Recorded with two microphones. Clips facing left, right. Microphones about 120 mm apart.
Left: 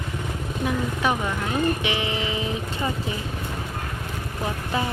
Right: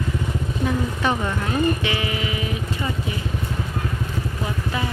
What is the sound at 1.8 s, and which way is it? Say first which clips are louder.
Music: right 1 dB; 20° left (ahead or behind).